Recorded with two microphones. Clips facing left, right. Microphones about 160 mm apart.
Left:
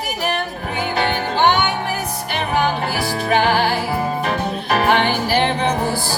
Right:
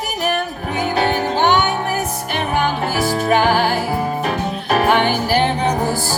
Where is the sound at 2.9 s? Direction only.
45° right (ahead or behind).